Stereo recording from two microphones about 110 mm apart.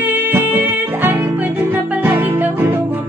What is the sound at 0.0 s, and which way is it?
Music, 20° right (ahead or behind).